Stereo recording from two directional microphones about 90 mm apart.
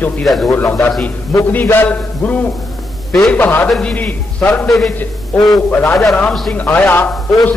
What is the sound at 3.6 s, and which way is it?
Speech, 5° left (ahead or behind).